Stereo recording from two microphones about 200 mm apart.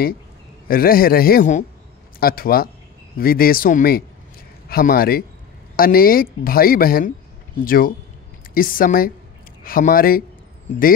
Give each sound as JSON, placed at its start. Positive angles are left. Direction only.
{"t": 0.7, "sound": "speech", "side_deg": 45}